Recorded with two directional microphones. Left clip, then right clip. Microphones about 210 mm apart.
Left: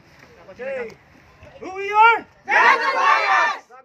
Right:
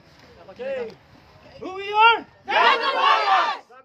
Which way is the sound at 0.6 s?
15° right (ahead or behind).